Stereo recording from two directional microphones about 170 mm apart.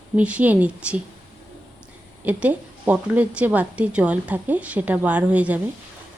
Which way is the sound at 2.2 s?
10° right (ahead or behind).